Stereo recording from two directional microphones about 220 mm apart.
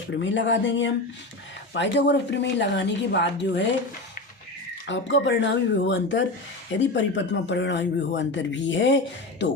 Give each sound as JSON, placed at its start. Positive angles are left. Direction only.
{"t": 0.1, "sound": "speech", "side_deg": 55}
{"t": 4.9, "sound": "speech", "side_deg": 55}